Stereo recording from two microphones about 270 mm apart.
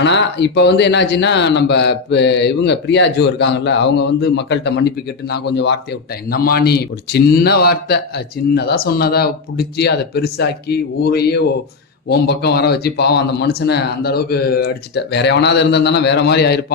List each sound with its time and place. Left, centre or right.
0.0 s speech: left